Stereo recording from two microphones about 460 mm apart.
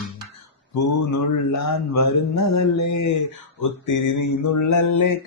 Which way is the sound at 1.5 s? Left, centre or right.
Left.